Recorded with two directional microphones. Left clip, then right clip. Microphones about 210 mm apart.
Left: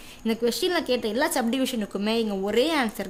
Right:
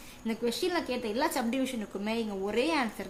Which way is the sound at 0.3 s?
35° left (ahead or behind).